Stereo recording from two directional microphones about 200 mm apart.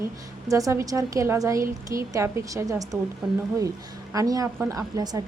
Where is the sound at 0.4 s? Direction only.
15° right (ahead or behind).